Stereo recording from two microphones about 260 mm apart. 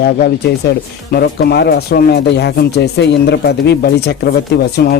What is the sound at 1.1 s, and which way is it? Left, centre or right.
Speech, left.